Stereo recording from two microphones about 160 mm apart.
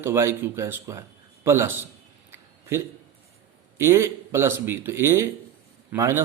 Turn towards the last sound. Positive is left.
turn(degrees=-15)  # may be behind; listen again after turning